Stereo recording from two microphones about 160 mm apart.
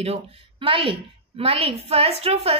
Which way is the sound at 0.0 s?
35° right (ahead or behind).